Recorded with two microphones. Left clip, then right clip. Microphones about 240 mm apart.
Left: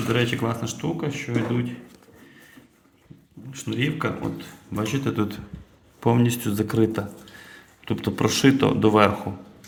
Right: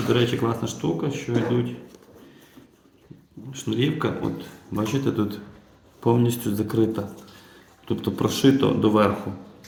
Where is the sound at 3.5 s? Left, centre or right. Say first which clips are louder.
Right 2 dB; left.